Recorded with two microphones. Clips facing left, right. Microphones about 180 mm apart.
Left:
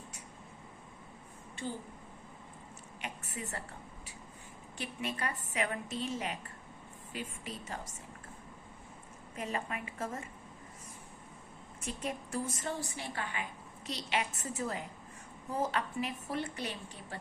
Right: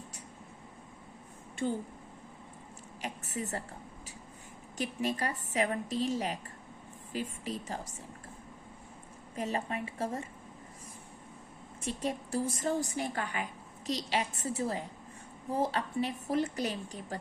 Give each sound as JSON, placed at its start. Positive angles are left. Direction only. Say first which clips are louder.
{"t": 3.0, "sound": "a sound", "louder": "right 5 dB", "side_deg": -35}
{"t": 4.8, "sound": "a woman's voice", "louder": "right 5 dB", "side_deg": -40}
{"t": 9.3, "sound": "a woman's voice", "louder": "right 4 dB", "side_deg": -35}
{"t": 11.8, "sound": "a woman's voice", "louder": "right 4 dB", "side_deg": -35}